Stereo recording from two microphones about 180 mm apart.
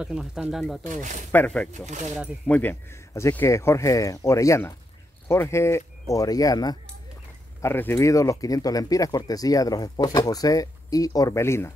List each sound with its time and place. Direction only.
0.0 s speech: 5° right (ahead or behind)
0.8 s speech: 45° right (ahead or behind)
1.3 s speech: 10° left (ahead or behind)